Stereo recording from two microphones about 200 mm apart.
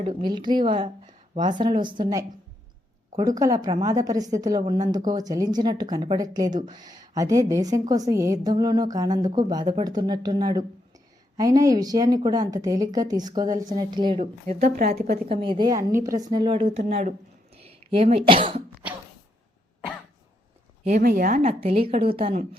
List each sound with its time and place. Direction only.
0.0 s a woman's voice: 25° right (ahead or behind)
14.4 s speech: 45° right (ahead or behind)
15.3 s a woman's voice: 25° right (ahead or behind)
20.8 s speech: 45° right (ahead or behind)
21.6 s a woman's voice: 30° right (ahead or behind)